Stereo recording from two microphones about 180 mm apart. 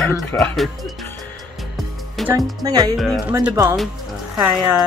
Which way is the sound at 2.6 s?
20° right (ahead or behind).